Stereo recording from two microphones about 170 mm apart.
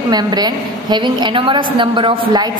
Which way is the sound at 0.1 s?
25° right (ahead or behind).